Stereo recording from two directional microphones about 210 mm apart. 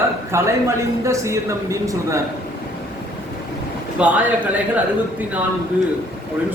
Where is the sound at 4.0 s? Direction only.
5° right (ahead or behind).